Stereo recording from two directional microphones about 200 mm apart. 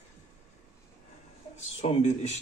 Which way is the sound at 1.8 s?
30° left (ahead or behind).